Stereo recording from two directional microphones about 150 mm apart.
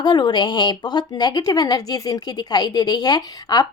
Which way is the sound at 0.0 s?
30° left (ahead or behind).